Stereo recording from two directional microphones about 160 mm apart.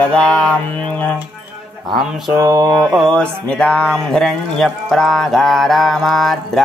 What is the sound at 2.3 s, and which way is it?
Mantra, 25° right (ahead or behind).